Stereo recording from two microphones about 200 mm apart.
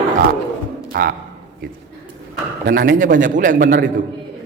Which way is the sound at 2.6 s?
45° right (ahead or behind).